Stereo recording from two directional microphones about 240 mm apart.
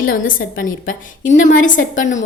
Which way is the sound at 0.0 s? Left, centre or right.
Left.